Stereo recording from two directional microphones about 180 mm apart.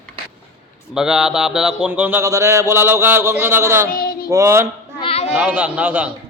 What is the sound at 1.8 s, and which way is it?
Speech, 10° right (ahead or behind).